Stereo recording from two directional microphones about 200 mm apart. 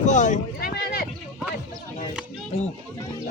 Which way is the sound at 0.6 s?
55° left (ahead or behind).